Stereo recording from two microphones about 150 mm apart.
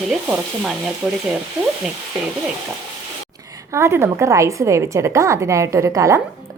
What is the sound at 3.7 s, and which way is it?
A woman's voice, 15° right (ahead or behind).